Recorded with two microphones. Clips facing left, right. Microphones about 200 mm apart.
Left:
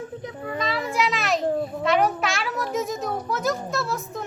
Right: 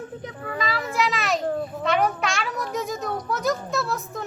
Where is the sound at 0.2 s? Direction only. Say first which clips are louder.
Left 1 dB; centre (ahead or behind).